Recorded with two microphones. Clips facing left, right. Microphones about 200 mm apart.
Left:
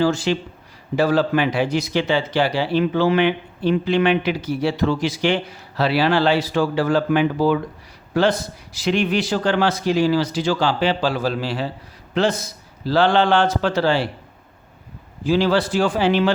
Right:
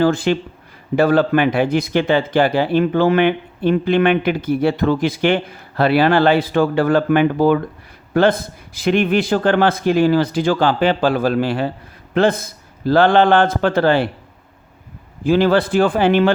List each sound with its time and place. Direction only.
0.0 s a man's voice: 55° right (ahead or behind)
15.2 s a man's voice: 55° right (ahead or behind)